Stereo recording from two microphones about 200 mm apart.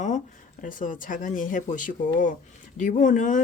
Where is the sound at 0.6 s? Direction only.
40° left (ahead or behind).